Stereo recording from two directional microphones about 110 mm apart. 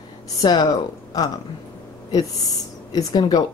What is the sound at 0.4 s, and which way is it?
Speech, 40° left (ahead or behind).